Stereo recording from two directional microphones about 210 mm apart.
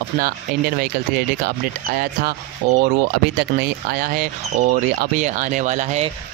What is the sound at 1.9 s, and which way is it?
Speech, 45° right (ahead or behind).